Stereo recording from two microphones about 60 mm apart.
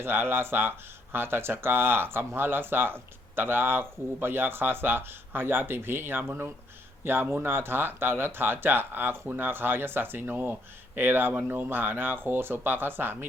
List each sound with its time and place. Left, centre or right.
0.0 s speech: right